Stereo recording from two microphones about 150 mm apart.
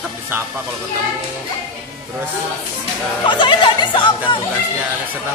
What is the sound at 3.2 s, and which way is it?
Speech, 30° left (ahead or behind).